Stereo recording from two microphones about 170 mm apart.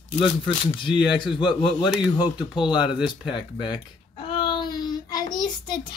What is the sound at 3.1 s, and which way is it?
Babbling, 25° left (ahead or behind).